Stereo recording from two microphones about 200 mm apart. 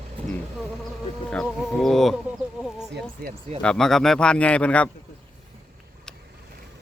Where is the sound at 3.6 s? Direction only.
Centre (ahead or behind).